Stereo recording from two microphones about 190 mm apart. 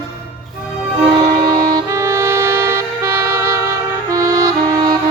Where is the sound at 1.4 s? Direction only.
20° right (ahead or behind).